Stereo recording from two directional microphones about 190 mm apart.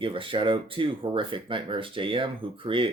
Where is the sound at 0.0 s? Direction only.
25° right (ahead or behind).